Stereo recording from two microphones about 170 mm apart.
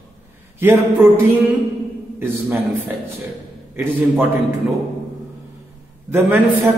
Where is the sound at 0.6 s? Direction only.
10° right (ahead or behind).